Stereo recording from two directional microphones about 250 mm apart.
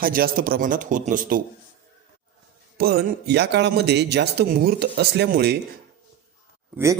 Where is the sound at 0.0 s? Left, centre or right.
Right.